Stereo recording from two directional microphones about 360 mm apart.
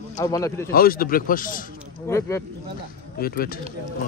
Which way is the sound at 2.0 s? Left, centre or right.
Centre.